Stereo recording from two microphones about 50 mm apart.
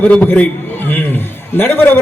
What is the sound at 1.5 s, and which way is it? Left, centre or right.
Speech, left.